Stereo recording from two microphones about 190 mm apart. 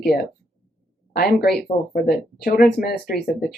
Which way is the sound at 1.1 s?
55° left (ahead or behind).